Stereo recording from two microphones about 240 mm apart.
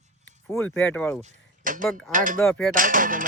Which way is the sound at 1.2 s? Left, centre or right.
Right.